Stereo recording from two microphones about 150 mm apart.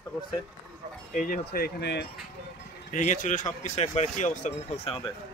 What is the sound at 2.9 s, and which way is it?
Speech, 60° left (ahead or behind).